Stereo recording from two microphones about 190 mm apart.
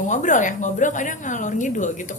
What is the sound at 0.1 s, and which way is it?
A woman's voice, 40° left (ahead or behind).